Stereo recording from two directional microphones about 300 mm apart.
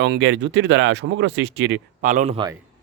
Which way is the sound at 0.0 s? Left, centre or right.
Right.